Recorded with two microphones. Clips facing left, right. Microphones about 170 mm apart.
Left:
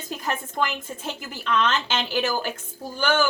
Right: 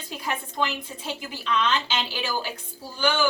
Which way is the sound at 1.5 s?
50° left (ahead or behind).